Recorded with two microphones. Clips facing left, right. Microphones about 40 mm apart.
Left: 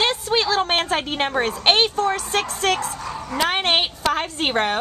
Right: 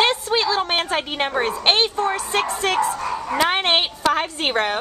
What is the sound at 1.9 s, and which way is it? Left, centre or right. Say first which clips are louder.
Speech: even; centre.